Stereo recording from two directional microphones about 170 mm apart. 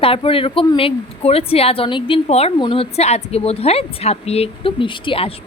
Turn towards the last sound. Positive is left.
turn(degrees=30)  # may be behind; listen again after turning